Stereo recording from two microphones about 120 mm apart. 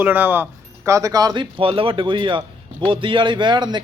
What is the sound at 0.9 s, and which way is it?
A man's voice, 25° right (ahead or behind).